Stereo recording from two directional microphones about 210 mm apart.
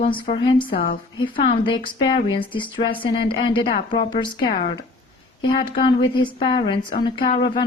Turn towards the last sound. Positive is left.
turn(degrees=25)  # may be behind; listen again after turning